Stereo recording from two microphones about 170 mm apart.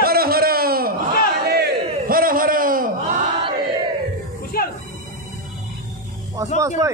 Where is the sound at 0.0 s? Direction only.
60° right (ahead or behind).